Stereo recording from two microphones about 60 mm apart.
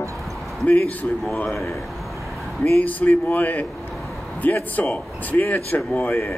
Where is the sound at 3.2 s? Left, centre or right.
Left.